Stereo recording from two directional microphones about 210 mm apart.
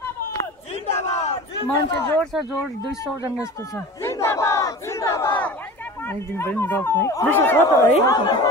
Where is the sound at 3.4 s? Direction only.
15° left (ahead or behind).